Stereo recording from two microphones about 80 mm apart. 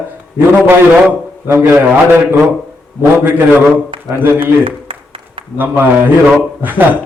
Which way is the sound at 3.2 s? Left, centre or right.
Right.